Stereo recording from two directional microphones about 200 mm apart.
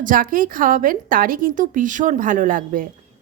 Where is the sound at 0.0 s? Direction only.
40° right (ahead or behind).